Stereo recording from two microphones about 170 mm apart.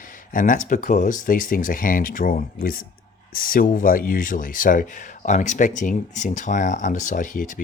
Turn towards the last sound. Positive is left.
turn(degrees=50)  # may be behind; listen again after turning